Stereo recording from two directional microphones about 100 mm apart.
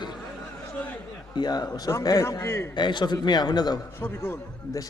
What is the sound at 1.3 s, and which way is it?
Speech, 45° left (ahead or behind).